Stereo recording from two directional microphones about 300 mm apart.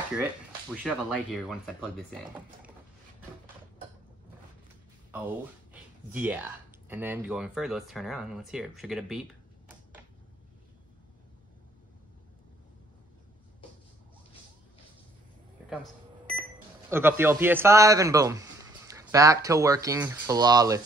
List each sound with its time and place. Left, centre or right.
0.1 s speech: centre
5.1 s speech: centre
15.7 s a sound: centre
16.9 s speech: centre